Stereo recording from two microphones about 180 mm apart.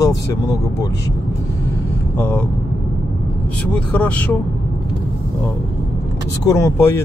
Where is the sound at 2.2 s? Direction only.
10° left (ahead or behind).